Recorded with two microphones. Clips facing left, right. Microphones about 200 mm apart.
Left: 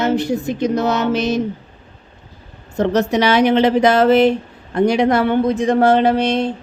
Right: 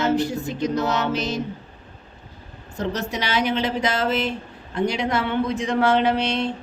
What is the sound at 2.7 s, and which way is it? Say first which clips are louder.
A woman's voice: left 11 dB; 70° left (ahead or behind).